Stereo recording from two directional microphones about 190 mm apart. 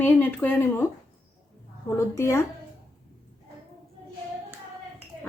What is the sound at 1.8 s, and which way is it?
Speech, 15° left (ahead or behind).